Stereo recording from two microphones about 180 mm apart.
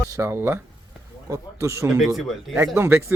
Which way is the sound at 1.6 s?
15° right (ahead or behind).